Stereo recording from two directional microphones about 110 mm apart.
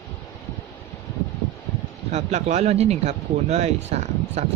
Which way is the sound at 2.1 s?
90° right.